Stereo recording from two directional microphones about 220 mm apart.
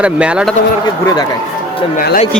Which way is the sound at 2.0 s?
45° left (ahead or behind).